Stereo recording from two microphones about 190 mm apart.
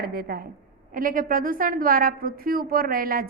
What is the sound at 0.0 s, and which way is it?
A woman's voice, 50° right (ahead or behind).